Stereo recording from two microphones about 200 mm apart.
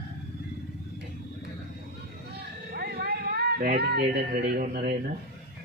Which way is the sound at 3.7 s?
55° right (ahead or behind).